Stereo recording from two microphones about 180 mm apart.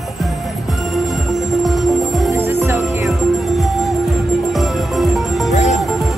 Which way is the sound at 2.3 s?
15° right (ahead or behind).